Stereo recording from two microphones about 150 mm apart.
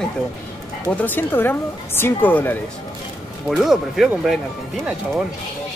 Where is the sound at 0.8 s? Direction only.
15° left (ahead or behind).